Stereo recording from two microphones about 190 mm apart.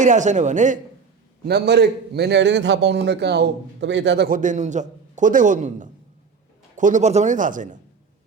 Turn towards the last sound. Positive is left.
turn(degrees=-40)  # may be behind; listen again after turning